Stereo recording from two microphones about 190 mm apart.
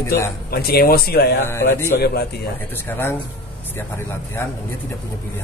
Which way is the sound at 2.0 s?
55° left (ahead or behind).